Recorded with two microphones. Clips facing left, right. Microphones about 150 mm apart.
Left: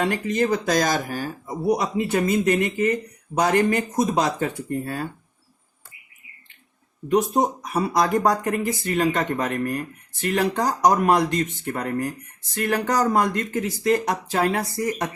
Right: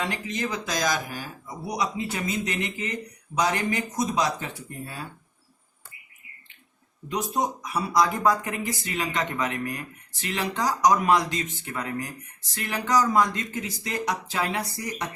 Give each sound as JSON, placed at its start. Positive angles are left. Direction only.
{"t": 0.0, "sound": "speech", "side_deg": 50}
{"t": 7.1, "sound": "speech", "side_deg": 55}